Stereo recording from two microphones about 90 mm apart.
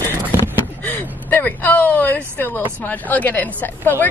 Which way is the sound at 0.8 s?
20° left (ahead or behind).